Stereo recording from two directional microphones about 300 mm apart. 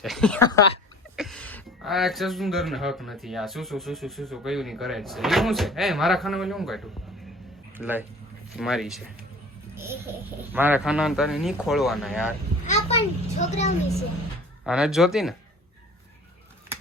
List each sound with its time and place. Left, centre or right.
0.0 s speech: centre
10.5 s speech: centre
12.6 s a child's voice: left
14.6 s speech: centre